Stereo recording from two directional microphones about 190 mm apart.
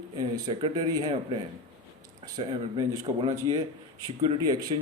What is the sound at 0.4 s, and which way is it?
Speech, 20° right (ahead or behind).